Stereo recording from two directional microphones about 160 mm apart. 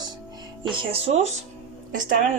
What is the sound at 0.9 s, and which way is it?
Speech, 40° right (ahead or behind).